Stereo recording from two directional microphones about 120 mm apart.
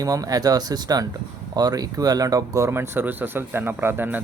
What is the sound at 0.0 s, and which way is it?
Speech, 30° right (ahead or behind).